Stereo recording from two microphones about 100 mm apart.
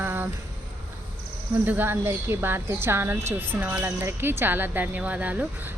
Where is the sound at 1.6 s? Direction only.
20° right (ahead or behind).